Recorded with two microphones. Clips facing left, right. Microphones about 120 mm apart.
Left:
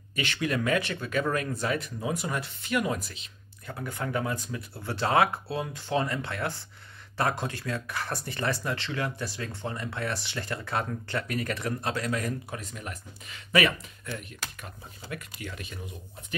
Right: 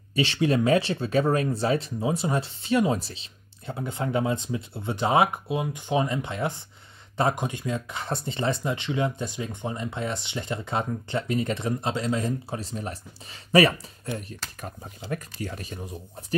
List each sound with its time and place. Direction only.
0.1 s speech: 30° right (ahead or behind)